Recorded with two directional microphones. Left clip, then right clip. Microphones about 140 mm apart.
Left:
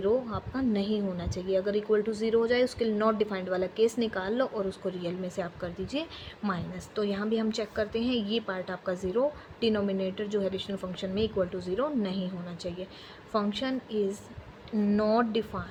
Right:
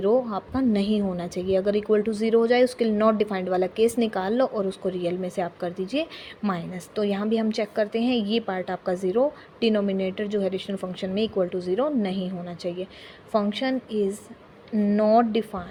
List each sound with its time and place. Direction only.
0.0 s speech: 45° right (ahead or behind)